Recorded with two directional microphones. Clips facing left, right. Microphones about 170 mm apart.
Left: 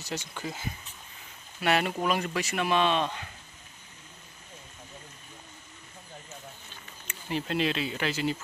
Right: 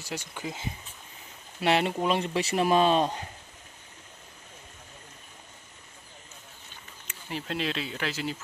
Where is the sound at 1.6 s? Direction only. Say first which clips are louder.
Right 2 dB; 25° right (ahead or behind).